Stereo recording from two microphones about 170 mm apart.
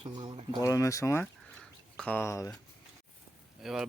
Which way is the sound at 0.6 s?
20° left (ahead or behind).